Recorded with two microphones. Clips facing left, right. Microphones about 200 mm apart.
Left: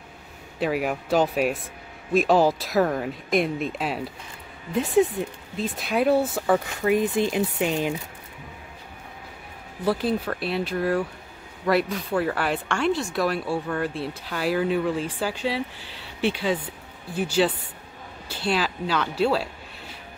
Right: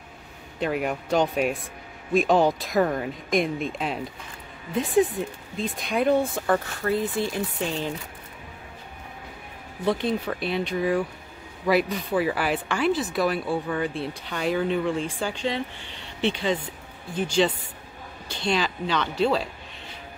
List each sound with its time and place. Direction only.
0.6 s speech: 5° left (ahead or behind)
6.8 s speech: 15° left (ahead or behind)
9.8 s speech: 5° left (ahead or behind)